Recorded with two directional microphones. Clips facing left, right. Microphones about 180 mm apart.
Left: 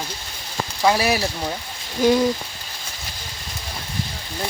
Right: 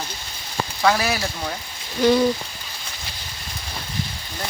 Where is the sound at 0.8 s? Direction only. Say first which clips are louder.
Left 2 dB; 20° left (ahead or behind).